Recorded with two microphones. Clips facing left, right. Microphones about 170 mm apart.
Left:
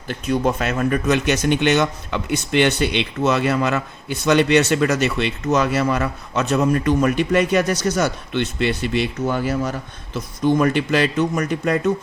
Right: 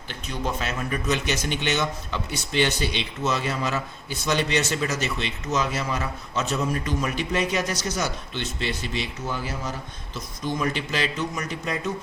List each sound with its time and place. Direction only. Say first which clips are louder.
0.1 s speech: left 10 dB; 55° left (ahead or behind)